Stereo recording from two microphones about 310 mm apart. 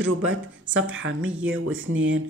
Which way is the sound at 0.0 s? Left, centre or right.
Right.